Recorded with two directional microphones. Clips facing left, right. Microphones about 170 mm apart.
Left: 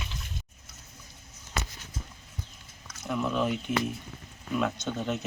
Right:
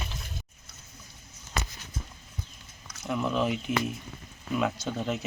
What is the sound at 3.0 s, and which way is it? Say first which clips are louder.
Speech: right 1 dB; centre (ahead or behind).